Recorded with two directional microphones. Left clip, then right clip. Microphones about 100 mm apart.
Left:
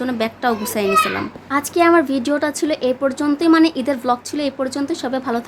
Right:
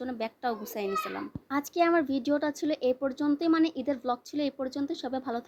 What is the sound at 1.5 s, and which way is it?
A woman's voice, 50° right (ahead or behind).